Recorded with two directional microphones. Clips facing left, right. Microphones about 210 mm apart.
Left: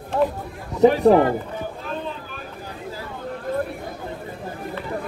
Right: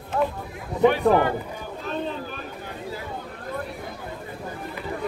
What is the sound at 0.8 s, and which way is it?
Speech, 35° left (ahead or behind).